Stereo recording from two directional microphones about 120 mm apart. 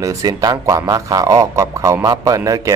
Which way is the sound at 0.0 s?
30° right (ahead or behind).